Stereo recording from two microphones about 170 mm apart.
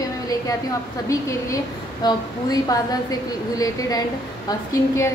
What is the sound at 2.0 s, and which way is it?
A woman's voice, 20° left (ahead or behind).